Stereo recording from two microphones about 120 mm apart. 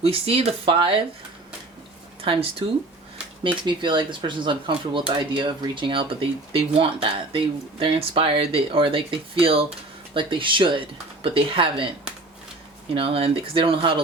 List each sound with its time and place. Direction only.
0.0 s speech: 55° right (ahead or behind)
2.2 s speech: 50° right (ahead or behind)
3.7 s speech: 40° right (ahead or behind)
12.9 s speech: 50° right (ahead or behind)